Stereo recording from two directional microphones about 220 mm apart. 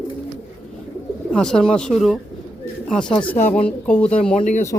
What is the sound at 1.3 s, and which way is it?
Speech, 5° left (ahead or behind).